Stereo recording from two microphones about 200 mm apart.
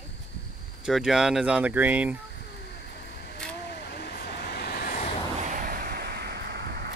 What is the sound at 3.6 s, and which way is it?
Vehicle, 55° left (ahead or behind).